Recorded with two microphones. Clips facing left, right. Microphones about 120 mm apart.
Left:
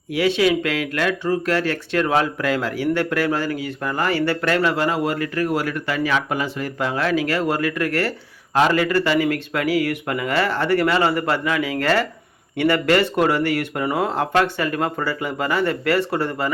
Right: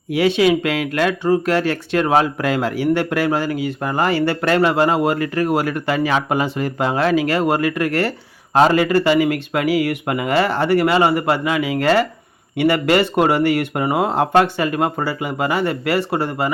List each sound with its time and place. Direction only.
0.1 s speech: 25° right (ahead or behind)